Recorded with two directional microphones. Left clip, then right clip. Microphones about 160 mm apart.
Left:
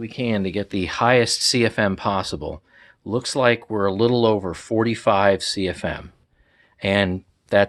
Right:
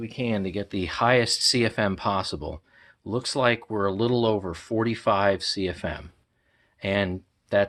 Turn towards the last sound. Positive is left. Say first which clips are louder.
# left 5 dB
turn(degrees=45)  # may be behind; listen again after turning